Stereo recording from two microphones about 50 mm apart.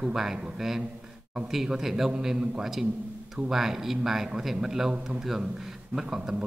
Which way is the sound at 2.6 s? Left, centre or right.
Centre.